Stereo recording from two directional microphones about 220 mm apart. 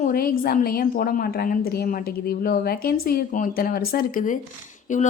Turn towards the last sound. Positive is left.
turn(degrees=35)  # may be behind; listen again after turning